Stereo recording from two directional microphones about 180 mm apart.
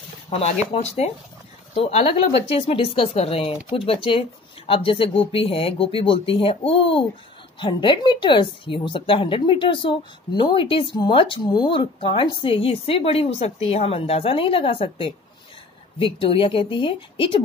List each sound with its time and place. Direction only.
0.3 s a woman's voice: 35° left (ahead or behind)